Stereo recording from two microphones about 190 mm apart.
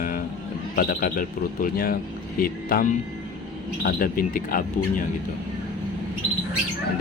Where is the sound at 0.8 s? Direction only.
45° left (ahead or behind).